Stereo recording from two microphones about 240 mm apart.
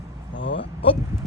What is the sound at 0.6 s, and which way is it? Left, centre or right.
Speech, left.